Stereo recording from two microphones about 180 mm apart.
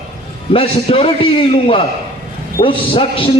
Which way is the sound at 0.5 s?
30° left (ahead or behind).